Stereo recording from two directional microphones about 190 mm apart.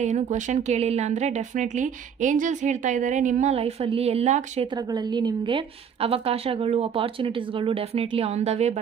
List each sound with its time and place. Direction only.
0.0 s speech: 40° right (ahead or behind)
4.9 s speech: 25° right (ahead or behind)